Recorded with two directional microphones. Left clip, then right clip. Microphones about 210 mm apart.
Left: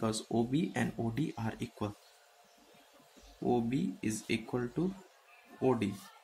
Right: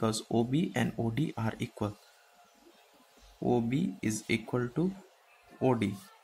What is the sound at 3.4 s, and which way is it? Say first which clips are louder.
Speech: right 2 dB; 25° right (ahead or behind).